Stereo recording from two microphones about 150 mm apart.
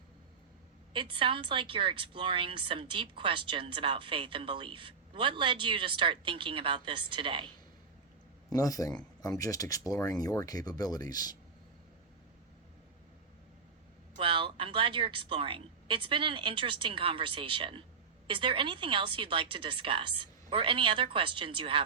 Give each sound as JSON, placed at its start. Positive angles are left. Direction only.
{"t": 0.9, "sound": "a woman's voice", "side_deg": -35}
{"t": 8.5, "sound": "speech", "side_deg": 25}
{"t": 14.2, "sound": "a woman's voice", "side_deg": -35}